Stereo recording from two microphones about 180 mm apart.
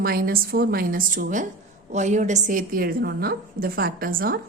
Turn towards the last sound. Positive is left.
turn(degrees=-55)  # may be behind; listen again after turning